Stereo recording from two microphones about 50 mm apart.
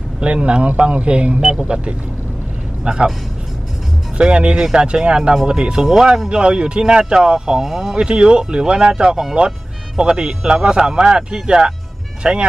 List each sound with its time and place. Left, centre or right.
0.2 s speech: right
4.2 s speech: right